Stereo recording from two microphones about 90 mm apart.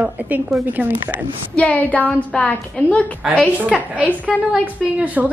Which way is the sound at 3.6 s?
15° right (ahead or behind).